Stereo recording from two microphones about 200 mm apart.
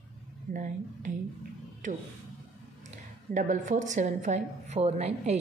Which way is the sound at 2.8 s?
40° right (ahead or behind).